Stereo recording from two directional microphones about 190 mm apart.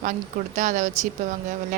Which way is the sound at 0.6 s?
40° right (ahead or behind).